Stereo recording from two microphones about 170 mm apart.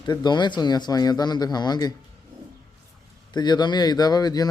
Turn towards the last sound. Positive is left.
turn(degrees=25)  # may be behind; listen again after turning